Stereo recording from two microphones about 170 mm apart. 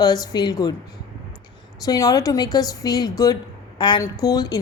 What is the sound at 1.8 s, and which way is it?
A woman's voice, 20° left (ahead or behind).